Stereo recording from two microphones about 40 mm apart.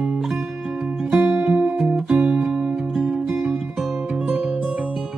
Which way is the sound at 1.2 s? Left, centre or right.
Centre.